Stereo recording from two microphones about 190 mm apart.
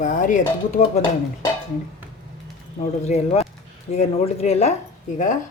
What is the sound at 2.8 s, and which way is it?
A woman's voice, 35° left (ahead or behind).